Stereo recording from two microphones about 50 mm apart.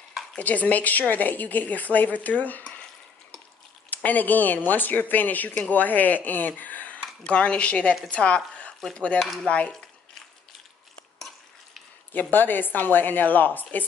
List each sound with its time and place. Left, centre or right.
0.4 s a woman's voice: left
3.9 s a woman's voice: left
7.2 s speech: left
9.2 s stir: centre
9.5 s speech: left
12.1 s a woman's voice: left